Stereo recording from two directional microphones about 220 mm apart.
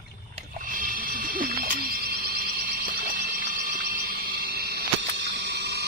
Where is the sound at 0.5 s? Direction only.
40° right (ahead or behind).